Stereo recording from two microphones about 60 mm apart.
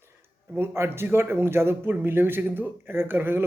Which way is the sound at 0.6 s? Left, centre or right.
Right.